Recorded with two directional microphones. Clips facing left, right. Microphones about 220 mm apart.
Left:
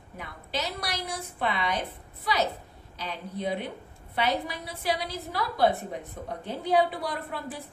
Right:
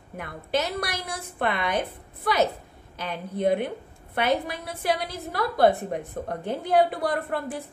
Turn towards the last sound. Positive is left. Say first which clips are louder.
# right 7 dB
turn(degrees=-50)  # may be behind; listen again after turning